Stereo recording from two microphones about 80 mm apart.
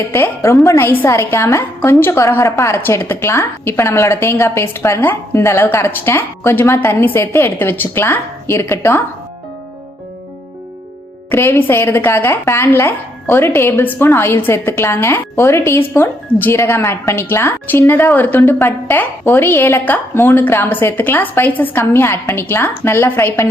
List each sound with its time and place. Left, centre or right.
0.1 s a woman's voice: left
11.3 s a woman's voice: left